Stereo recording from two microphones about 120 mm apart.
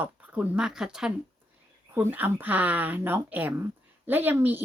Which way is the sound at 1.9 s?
15° right (ahead or behind).